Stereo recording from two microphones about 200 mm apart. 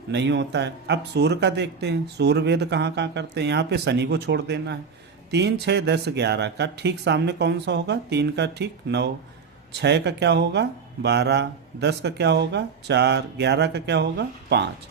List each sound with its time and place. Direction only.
0.1 s speech: 60° right (ahead or behind)